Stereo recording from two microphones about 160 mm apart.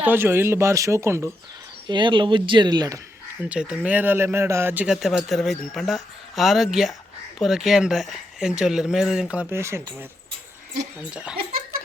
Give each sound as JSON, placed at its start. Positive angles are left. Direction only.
{"t": 0.0, "sound": "speech", "side_deg": -15}
{"t": 1.9, "sound": "speech", "side_deg": -30}
{"t": 3.5, "sound": "a man's voice", "side_deg": -5}
{"t": 11.1, "sound": "speech", "side_deg": -5}